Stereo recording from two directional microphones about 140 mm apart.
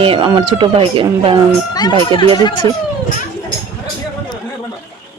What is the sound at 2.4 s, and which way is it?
Speech, 30° left (ahead or behind).